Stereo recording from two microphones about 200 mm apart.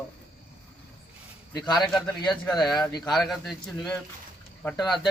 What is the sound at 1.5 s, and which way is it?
Speech, 20° left (ahead or behind).